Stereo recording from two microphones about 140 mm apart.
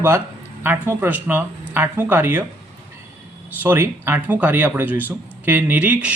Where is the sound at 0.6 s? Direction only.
15° right (ahead or behind).